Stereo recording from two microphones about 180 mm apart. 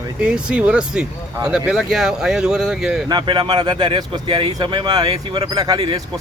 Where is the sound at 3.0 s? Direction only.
25° right (ahead or behind).